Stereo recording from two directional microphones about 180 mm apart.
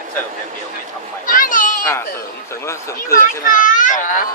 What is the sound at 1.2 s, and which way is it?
Children playing, 50° left (ahead or behind).